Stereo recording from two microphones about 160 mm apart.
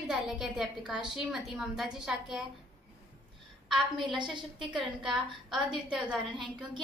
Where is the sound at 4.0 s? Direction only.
30° right (ahead or behind).